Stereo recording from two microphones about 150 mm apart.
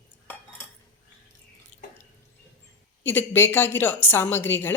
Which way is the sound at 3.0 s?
15° left (ahead or behind).